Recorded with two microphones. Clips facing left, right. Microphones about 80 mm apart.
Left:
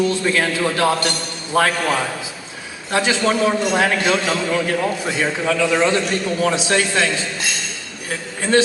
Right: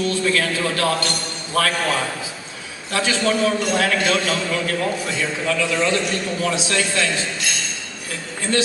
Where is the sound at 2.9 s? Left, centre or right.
Left.